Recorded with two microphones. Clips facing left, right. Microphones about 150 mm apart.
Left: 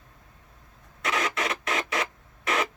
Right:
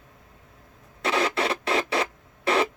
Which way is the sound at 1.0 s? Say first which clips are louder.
Right 4 dB; 30° right (ahead or behind).